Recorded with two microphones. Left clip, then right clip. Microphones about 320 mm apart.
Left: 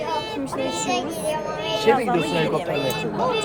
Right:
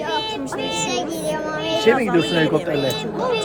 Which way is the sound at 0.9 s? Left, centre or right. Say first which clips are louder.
Right 1 dB; right.